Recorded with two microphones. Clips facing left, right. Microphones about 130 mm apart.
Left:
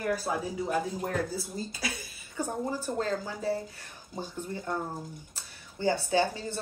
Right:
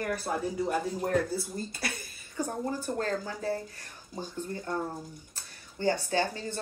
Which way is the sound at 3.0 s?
15° left (ahead or behind).